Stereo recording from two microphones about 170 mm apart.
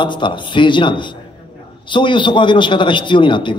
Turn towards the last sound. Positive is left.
turn(degrees=30)  # may be behind; listen again after turning